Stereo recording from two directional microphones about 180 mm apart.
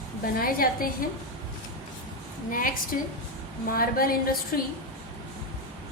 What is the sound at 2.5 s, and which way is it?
A woman's voice, 50° left (ahead or behind).